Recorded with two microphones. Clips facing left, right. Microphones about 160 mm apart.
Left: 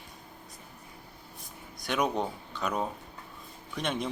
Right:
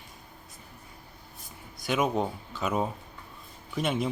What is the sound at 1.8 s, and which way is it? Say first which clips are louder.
A man's voice: right 2 dB; centre (ahead or behind).